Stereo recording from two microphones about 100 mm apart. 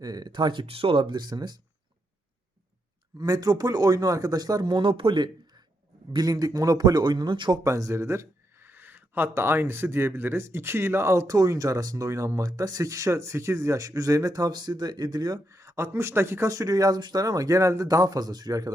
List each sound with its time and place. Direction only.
0.0 s speech: 40° right (ahead or behind)
3.2 s speech: 40° right (ahead or behind); by 5.3 s 55° right (ahead or behind)
6.1 s speech: 40° right (ahead or behind)
7.6 s speech: 30° right (ahead or behind)